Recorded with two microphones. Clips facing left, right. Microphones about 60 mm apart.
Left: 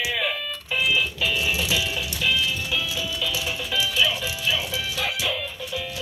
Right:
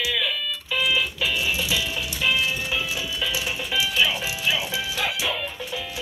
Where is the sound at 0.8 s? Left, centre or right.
Centre.